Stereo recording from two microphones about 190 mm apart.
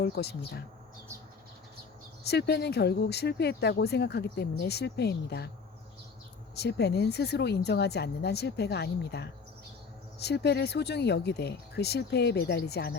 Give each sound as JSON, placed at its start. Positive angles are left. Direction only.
{"t": 0.0, "sound": "speech", "side_deg": 60}
{"t": 2.2, "sound": "speech", "side_deg": 60}
{"t": 6.6, "sound": "speech", "side_deg": 60}